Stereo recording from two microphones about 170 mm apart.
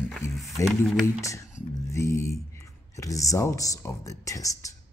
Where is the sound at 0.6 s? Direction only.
Centre (ahead or behind).